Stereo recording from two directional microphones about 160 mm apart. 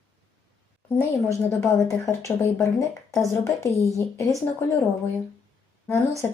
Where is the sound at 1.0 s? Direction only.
20° left (ahead or behind).